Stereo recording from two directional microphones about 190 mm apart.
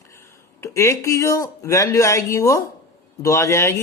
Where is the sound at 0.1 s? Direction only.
15° left (ahead or behind).